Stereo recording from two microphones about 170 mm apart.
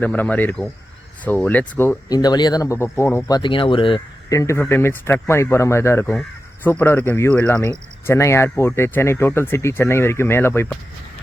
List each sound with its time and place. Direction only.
0.0 s speech: 10° left (ahead or behind)
2.0 s speech: 25° left (ahead or behind)
4.4 s speech: 15° left (ahead or behind)